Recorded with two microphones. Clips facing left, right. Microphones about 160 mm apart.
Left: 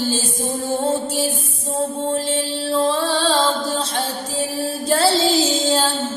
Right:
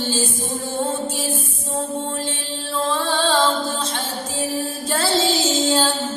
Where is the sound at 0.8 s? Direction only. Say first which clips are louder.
Left 1 dB; 35° left (ahead or behind).